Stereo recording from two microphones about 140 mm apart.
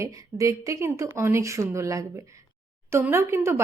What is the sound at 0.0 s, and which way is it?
Speech, 20° right (ahead or behind).